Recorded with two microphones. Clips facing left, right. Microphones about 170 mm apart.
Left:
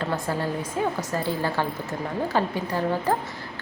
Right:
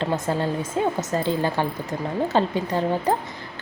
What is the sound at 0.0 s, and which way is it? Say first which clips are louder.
A woman's voice: right 3 dB; 25° right (ahead or behind).